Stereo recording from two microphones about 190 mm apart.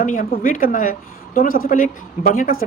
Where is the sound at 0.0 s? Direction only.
45° left (ahead or behind).